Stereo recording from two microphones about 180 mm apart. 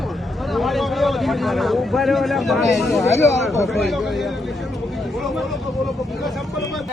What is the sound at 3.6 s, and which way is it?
Speech, centre (ahead or behind).